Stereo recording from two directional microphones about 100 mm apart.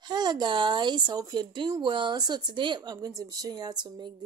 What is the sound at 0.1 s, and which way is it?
Speech, 45° right (ahead or behind).